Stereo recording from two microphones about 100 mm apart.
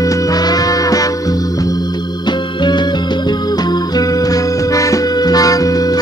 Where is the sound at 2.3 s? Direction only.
50° left (ahead or behind).